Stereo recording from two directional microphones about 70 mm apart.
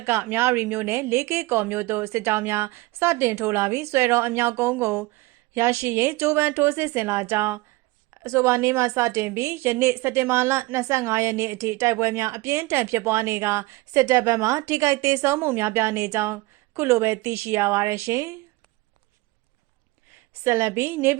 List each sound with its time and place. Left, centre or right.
0.0 s a woman's voice: right
20.4 s a woman's voice: right